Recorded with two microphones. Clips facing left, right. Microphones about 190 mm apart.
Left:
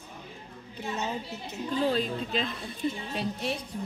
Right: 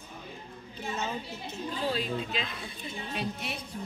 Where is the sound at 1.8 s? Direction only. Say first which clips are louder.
Left 1 dB; 40° left (ahead or behind).